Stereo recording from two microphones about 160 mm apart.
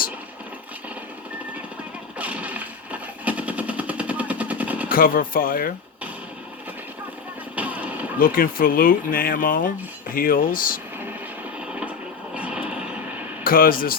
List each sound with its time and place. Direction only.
2.1 s a sound: 10° right (ahead or behind)
4.9 s speech: 65° left (ahead or behind)
7.5 s artillery fire: 10° right (ahead or behind)
8.2 s speech: 65° left (ahead or behind)
12.3 s a sound: 5° right (ahead or behind)
13.4 s speech: 65° left (ahead or behind)